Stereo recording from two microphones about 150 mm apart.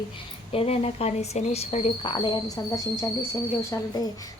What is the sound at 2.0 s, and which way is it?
A woman's voice, 30° left (ahead or behind).